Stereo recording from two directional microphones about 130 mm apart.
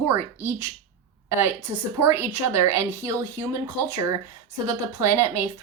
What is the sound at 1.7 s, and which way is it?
A woman's voice, 20° right (ahead or behind).